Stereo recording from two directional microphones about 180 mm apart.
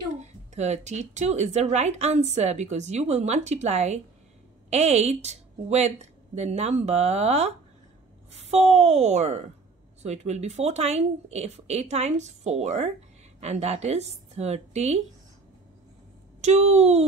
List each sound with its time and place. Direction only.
0.2 s speech: 40° right (ahead or behind)
16.3 s speech: 40° right (ahead or behind)